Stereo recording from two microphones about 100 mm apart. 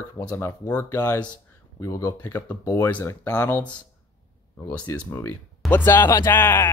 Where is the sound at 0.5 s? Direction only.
15° left (ahead or behind).